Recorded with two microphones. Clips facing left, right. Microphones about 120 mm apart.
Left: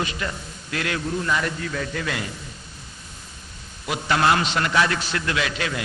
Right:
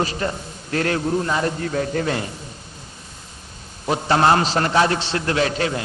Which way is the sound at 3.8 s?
35° right (ahead or behind).